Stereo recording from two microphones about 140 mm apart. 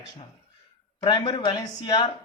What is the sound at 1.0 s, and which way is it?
A man's voice, 35° left (ahead or behind).